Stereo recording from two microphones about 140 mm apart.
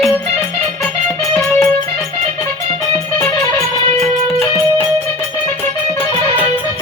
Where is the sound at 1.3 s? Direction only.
20° left (ahead or behind).